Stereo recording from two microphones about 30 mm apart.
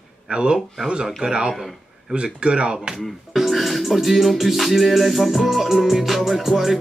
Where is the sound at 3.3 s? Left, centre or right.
Centre.